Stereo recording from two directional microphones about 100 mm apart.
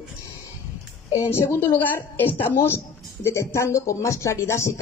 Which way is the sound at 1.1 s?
30° left (ahead or behind).